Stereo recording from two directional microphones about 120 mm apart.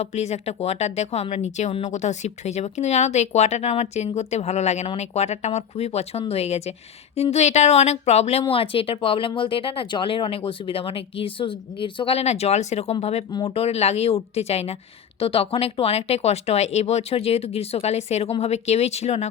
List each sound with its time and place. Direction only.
0.0 s speech: 65° left (ahead or behind)